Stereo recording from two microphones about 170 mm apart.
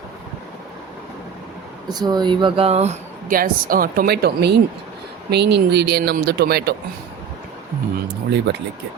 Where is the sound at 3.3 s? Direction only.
55° right (ahead or behind).